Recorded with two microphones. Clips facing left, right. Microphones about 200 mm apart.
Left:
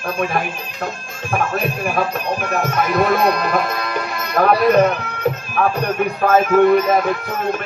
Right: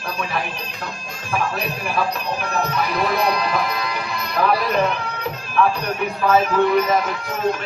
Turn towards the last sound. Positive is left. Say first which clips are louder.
# left 4 dB
turn(degrees=55)  # may be behind; listen again after turning